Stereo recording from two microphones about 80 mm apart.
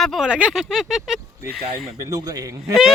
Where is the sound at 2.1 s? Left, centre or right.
Right.